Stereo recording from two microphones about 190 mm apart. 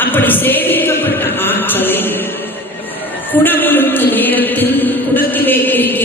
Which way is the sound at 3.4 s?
10° left (ahead or behind).